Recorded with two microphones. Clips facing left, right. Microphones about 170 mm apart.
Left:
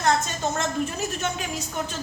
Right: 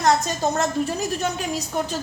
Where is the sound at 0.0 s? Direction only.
40° right (ahead or behind).